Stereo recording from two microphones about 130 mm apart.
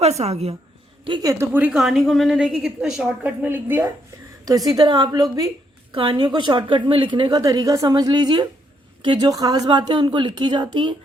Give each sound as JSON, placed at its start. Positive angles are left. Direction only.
{"t": 0.0, "sound": "a woman's voice", "side_deg": -55}
{"t": 1.0, "sound": "a woman's voice", "side_deg": -35}
{"t": 1.5, "sound": "a woman's voice", "side_deg": -10}
{"t": 4.4, "sound": "a woman's voice", "side_deg": -30}
{"t": 5.9, "sound": "a woman's voice", "side_deg": -40}
{"t": 9.3, "sound": "a woman's voice", "side_deg": -30}